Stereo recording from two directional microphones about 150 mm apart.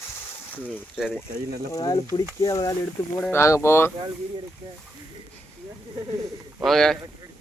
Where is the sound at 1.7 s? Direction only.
25° left (ahead or behind).